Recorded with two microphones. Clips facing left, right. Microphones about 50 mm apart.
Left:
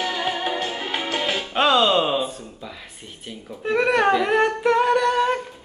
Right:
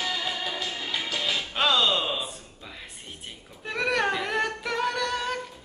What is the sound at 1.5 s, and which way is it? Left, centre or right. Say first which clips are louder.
Music: left 7 dB; centre.